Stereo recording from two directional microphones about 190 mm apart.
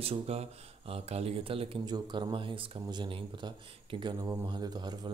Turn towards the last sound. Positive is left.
turn(degrees=-20)  # may be behind; listen again after turning